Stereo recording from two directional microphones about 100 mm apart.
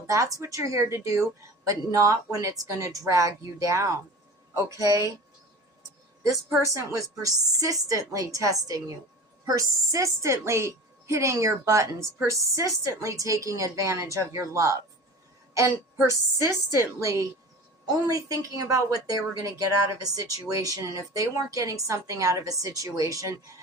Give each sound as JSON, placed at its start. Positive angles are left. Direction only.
{"t": 0.1, "sound": "a woman's voice", "side_deg": -35}
{"t": 6.7, "sound": "a woman's voice", "side_deg": -35}
{"t": 16.0, "sound": "a woman's voice", "side_deg": -30}